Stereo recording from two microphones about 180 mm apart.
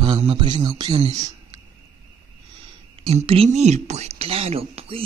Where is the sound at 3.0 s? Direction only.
35° right (ahead or behind).